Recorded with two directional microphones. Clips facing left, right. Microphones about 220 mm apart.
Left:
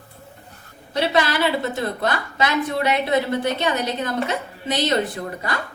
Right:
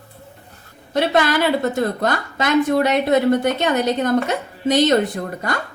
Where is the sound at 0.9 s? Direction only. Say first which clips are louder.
Right 3 dB; 50° right (ahead or behind).